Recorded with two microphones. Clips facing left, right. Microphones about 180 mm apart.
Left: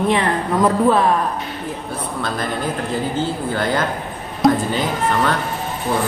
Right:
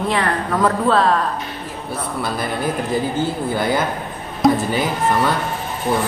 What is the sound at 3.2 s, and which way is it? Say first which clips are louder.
Speech: right 1 dB; 10° right (ahead or behind).